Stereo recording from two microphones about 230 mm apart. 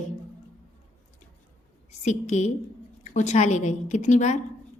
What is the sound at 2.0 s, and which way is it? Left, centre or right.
A woman's voice, left.